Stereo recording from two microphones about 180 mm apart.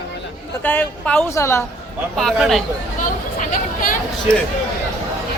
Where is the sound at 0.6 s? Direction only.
10° left (ahead or behind).